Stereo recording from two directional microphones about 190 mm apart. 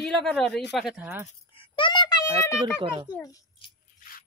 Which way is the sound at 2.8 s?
25° right (ahead or behind).